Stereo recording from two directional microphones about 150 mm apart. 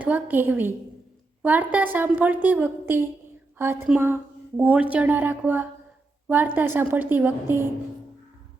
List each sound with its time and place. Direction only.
0.0 s a woman's voice: 10° right (ahead or behind)